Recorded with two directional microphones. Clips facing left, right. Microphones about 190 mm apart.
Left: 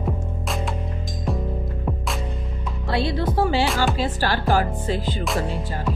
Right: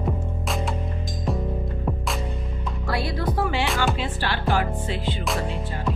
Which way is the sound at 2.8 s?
25° left (ahead or behind).